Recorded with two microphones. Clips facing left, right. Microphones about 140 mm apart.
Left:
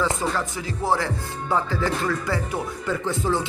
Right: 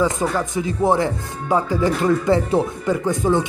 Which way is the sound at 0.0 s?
20° right (ahead or behind).